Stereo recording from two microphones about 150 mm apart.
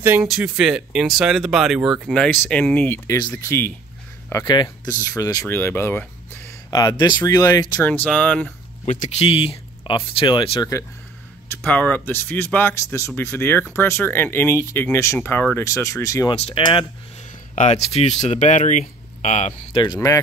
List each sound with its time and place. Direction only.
0.0 s speech: 10° right (ahead or behind)
2.2 s speech: 10° left (ahead or behind)
3.2 s speech: 25° left (ahead or behind)
6.7 s speech: 25° left (ahead or behind)
7.8 s speech: 10° left (ahead or behind)
8.8 s speech: 60° left (ahead or behind)
9.2 s speech: 40° left (ahead or behind)
11.6 s speech: 10° left (ahead or behind)
16.3 s speech: 40° left (ahead or behind)
17.6 s speech: 45° left (ahead or behind)
19.8 s speech: 30° left (ahead or behind)